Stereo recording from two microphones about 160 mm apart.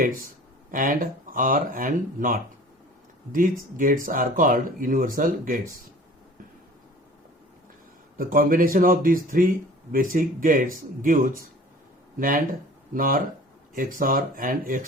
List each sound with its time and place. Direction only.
0.7 s speech: 55° right (ahead or behind)
8.2 s speech: 60° right (ahead or behind)